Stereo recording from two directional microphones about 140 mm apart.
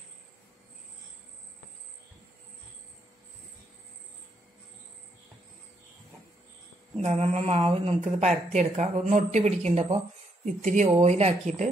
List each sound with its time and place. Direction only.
7.0 s a woman's voice: 50° right (ahead or behind)
9.7 s a woman's voice: 45° right (ahead or behind)
10.4 s speech: 65° right (ahead or behind)
10.9 s a woman's voice: 50° right (ahead or behind)